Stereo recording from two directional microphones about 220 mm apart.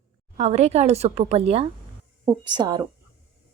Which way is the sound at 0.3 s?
30° right (ahead or behind).